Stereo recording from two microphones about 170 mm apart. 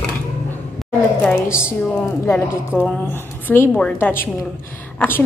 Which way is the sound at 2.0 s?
15° left (ahead or behind).